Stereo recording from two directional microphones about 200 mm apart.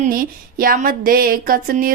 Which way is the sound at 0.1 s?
45° right (ahead or behind).